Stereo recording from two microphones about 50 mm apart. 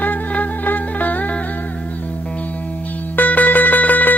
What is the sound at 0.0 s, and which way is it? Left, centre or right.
Music, left.